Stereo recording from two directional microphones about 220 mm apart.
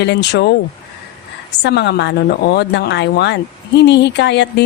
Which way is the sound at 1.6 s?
50° left (ahead or behind).